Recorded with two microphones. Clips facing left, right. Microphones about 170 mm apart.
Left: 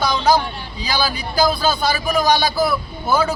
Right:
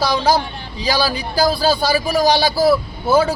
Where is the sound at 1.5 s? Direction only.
35° right (ahead or behind).